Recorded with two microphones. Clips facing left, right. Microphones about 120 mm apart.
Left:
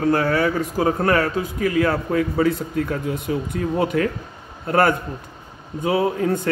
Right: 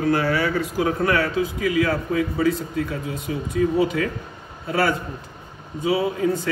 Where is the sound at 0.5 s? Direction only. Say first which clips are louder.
Left 1 dB; 45° left (ahead or behind).